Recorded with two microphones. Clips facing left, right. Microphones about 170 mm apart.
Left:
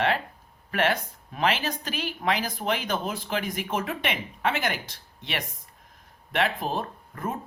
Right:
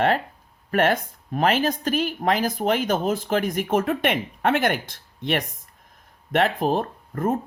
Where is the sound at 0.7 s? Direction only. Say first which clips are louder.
Right 5 dB; 45° right (ahead or behind).